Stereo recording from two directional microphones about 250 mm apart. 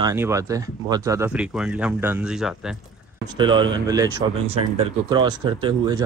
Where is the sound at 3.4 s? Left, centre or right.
Centre.